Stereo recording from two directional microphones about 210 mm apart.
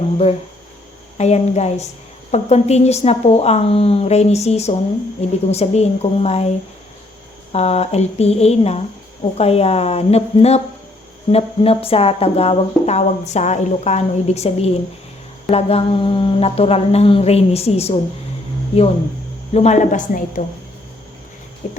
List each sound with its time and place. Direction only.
1.2 s a woman's voice: 30° left (ahead or behind)
7.5 s speech: 30° left (ahead or behind)
19.5 s a woman's voice: 35° left (ahead or behind)
21.6 s a sound: 35° left (ahead or behind)